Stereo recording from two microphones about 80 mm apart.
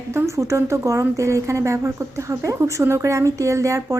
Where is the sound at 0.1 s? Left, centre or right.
Right.